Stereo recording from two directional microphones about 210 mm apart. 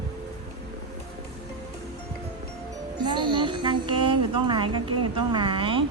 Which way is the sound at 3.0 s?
20° right (ahead or behind).